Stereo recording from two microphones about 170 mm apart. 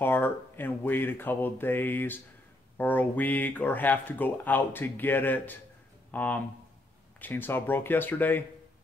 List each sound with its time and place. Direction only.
0.0 s speech: 10° left (ahead or behind)